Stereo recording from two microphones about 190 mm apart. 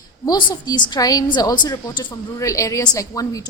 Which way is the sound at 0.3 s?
20° left (ahead or behind).